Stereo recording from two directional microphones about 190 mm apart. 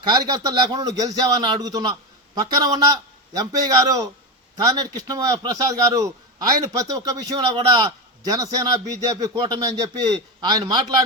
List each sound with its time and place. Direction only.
0.0 s a man's voice: 20° right (ahead or behind)